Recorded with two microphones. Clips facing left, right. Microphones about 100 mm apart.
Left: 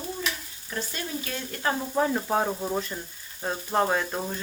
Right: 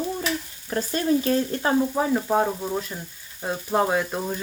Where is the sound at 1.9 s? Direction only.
5° right (ahead or behind).